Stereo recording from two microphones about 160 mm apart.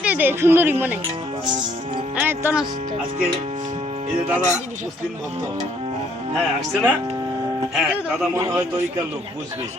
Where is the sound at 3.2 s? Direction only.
40° right (ahead or behind).